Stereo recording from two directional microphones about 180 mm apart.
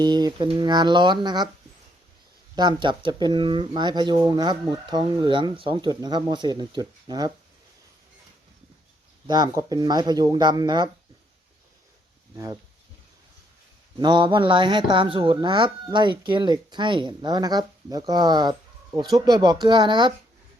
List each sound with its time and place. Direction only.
0.0 s speech: 25° right (ahead or behind)
2.6 s speech: 25° right (ahead or behind)
9.2 s speech: 25° right (ahead or behind)
14.0 s speech: 25° right (ahead or behind)